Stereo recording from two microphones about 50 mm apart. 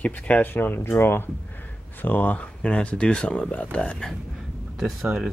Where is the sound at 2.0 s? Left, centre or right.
Left.